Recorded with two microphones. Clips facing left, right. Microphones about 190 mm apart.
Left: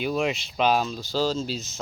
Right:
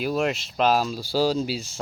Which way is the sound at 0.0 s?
Centre (ahead or behind).